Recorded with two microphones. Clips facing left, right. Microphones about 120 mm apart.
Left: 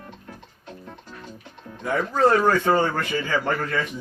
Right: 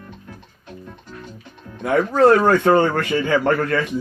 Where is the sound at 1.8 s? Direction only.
65° right (ahead or behind).